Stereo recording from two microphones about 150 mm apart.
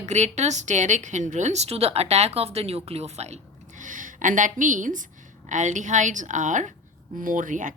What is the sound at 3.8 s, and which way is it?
Speech, 60° right (ahead or behind).